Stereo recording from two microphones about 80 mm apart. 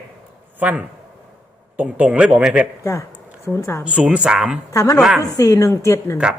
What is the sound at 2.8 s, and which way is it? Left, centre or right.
Speech, left.